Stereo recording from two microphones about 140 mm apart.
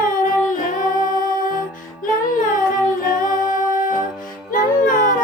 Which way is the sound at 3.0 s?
75° left (ahead or behind).